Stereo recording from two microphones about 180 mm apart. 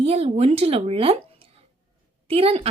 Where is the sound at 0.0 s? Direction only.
35° right (ahead or behind).